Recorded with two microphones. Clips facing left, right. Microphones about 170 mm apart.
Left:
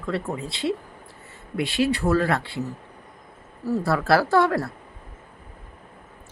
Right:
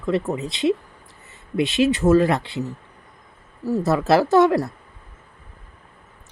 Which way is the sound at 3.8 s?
20° right (ahead or behind).